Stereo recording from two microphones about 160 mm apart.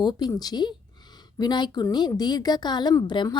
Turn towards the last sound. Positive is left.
turn(degrees=30)  # may be behind; listen again after turning